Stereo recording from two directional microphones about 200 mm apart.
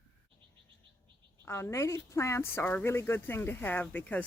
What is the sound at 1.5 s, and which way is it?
A woman's voice, 15° left (ahead or behind).